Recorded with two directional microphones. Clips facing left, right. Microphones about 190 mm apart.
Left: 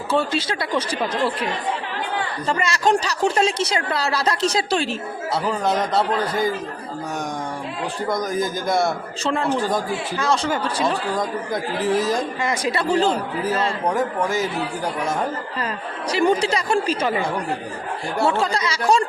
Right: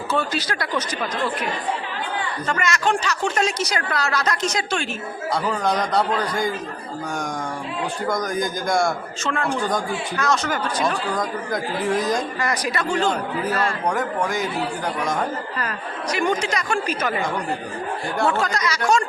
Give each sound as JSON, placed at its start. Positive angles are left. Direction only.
{"t": 0.1, "sound": "a man's voice", "side_deg": 30}
{"t": 2.5, "sound": "speech", "side_deg": 30}
{"t": 5.3, "sound": "a man's voice", "side_deg": 5}
{"t": 8.0, "sound": "a man's voice", "side_deg": 0}
{"t": 9.2, "sound": "a man's voice", "side_deg": 25}
{"t": 9.5, "sound": "a man's voice", "side_deg": 5}
{"t": 10.2, "sound": "a man's voice", "side_deg": 30}
{"t": 11.1, "sound": "a man's voice", "side_deg": 0}
{"t": 12.4, "sound": "a man's voice", "side_deg": 25}
{"t": 13.8, "sound": "a man's voice", "side_deg": 5}
{"t": 16.1, "sound": "speech", "side_deg": 30}
{"t": 18.3, "sound": "a man's voice", "side_deg": 30}